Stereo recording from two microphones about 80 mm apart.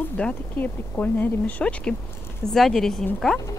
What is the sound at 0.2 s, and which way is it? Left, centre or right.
Speech, centre.